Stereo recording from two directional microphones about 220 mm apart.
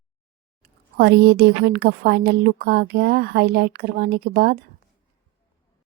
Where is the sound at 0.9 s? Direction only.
45° right (ahead or behind).